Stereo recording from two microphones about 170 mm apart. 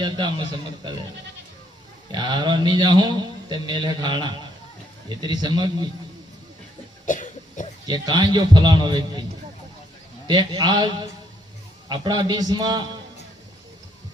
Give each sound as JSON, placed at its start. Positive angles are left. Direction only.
{"t": 0.0, "sound": "a man's voice", "side_deg": -25}
{"t": 2.1, "sound": "a man's voice", "side_deg": -25}
{"t": 7.0, "sound": "cough", "side_deg": 50}
{"t": 7.9, "sound": "a man's voice", "side_deg": -25}
{"t": 10.2, "sound": "a man's voice", "side_deg": -25}